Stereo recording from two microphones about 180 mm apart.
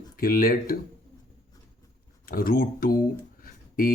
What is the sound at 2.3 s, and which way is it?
Speech, 55° left (ahead or behind).